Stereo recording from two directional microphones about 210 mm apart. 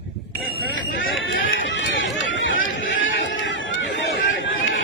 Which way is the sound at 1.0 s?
70° left (ahead or behind).